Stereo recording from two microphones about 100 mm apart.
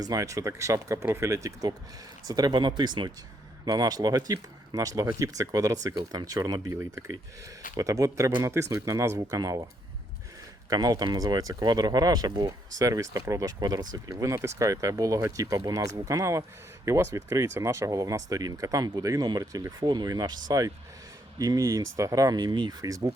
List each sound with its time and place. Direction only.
0.0 s speech: 35° right (ahead or behind)
10.7 s speech: 40° right (ahead or behind)